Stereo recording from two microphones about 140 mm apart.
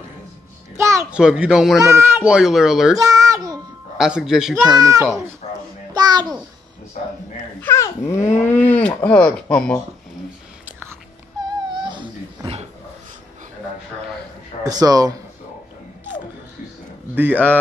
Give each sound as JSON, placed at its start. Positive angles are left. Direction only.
{"t": 0.7, "sound": "a sound", "side_deg": -20}
{"t": 1.1, "sound": "a child's voice", "side_deg": -5}
{"t": 1.8, "sound": "a child's voice", "side_deg": -20}
{"t": 3.0, "sound": "speech", "side_deg": -25}
{"t": 4.0, "sound": "a child's voice", "side_deg": -5}
{"t": 4.7, "sound": "speech", "side_deg": -25}
{"t": 5.4, "sound": "a sound", "side_deg": 50}
{"t": 5.9, "sound": "a sound", "side_deg": -30}
{"t": 7.0, "sound": "a man's voice", "side_deg": 65}
{"t": 7.6, "sound": "speech", "side_deg": 20}
{"t": 11.8, "sound": "a sound", "side_deg": -35}
{"t": 14.6, "sound": "speech", "side_deg": -25}
{"t": 17.1, "sound": "speech", "side_deg": -10}